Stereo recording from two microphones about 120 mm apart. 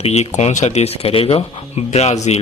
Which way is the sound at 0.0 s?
65° left (ahead or behind).